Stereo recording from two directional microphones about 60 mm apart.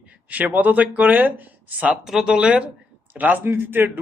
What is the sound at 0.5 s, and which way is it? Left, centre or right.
Speech, right.